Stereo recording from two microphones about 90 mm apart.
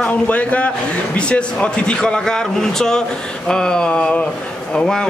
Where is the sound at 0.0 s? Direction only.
15° left (ahead or behind).